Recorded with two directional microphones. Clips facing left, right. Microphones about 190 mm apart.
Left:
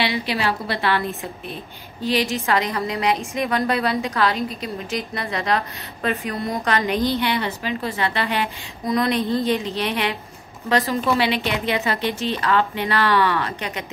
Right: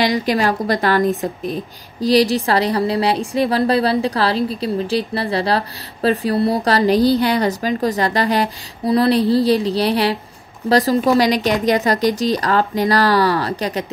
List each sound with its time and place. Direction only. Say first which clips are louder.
0.0 s a woman's voice: right 6 dB; 40° right (ahead or behind)